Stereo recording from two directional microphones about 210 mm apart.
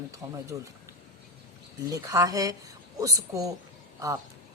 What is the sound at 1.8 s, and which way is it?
A woman's voice, 15° right (ahead or behind).